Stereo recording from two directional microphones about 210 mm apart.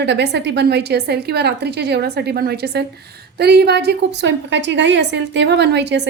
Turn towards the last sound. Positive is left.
turn(degrees=-55)  # may be behind; listen again after turning